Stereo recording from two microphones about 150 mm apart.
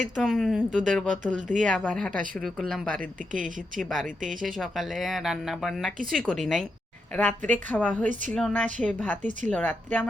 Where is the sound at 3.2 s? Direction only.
60° right (ahead or behind).